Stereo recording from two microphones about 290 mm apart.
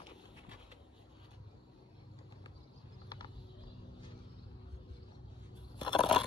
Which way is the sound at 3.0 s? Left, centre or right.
Centre.